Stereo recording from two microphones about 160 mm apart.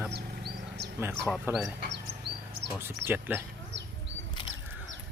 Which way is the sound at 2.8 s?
15° right (ahead or behind).